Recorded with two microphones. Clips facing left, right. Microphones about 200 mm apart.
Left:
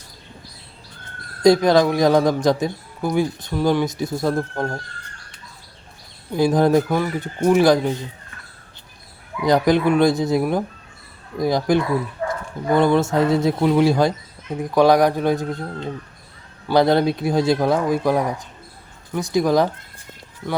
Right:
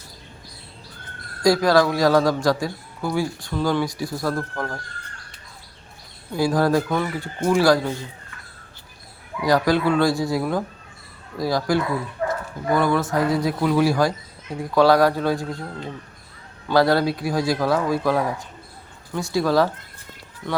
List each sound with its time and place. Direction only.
1.4 s a man's voice: 20° left (ahead or behind)
6.3 s a man's voice: 20° left (ahead or behind)
9.4 s a man's voice: 20° left (ahead or behind)